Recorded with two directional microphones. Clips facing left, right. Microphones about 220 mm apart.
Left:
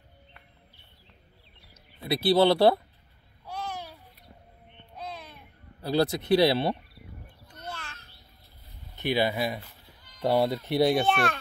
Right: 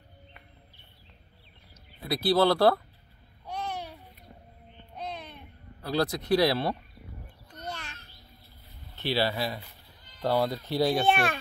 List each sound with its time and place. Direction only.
2.0 s speech: 25° left (ahead or behind)
4.9 s a sound: 5° left (ahead or behind)
5.8 s speech: 25° left (ahead or behind)
8.9 s speech: 15° left (ahead or behind)
11.1 s a child's voice: 10° right (ahead or behind)